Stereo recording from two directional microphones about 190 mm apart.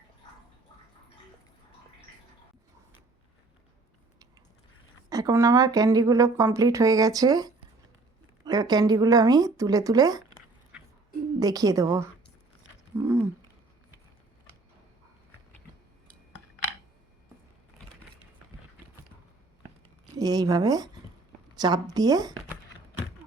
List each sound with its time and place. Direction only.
5.0 s a woman's voice: 20° right (ahead or behind)
11.3 s a woman's voice: 20° right (ahead or behind)
13.0 s a sound: 15° right (ahead or behind)
20.1 s speech: 20° right (ahead or behind)